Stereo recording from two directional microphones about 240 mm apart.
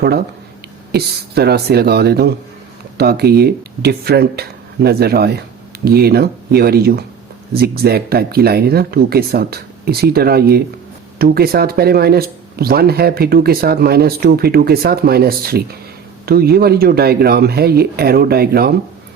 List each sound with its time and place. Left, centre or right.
0.9 s speech: right